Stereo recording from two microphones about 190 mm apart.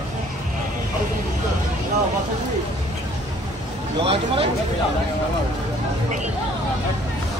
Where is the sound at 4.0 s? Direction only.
30° right (ahead or behind).